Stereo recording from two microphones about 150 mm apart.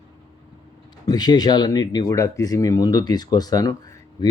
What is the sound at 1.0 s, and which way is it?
Speech, 25° left (ahead or behind).